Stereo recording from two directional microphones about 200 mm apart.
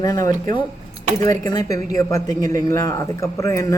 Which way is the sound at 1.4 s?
20° left (ahead or behind).